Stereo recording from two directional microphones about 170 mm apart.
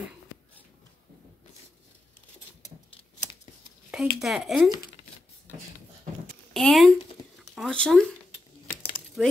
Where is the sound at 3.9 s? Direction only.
5° right (ahead or behind).